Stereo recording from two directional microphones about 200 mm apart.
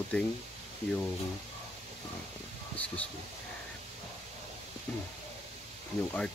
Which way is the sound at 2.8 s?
10° left (ahead or behind).